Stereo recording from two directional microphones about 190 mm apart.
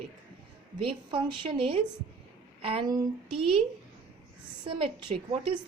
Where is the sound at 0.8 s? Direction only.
30° right (ahead or behind).